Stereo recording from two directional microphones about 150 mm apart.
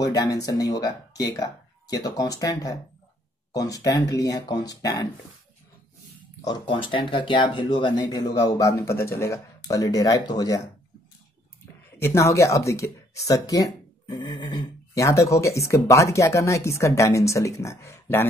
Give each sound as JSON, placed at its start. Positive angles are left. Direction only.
{"t": 0.0, "sound": "speech", "side_deg": 25}
{"t": 6.4, "sound": "speech", "side_deg": 30}
{"t": 12.0, "sound": "speech", "side_deg": 20}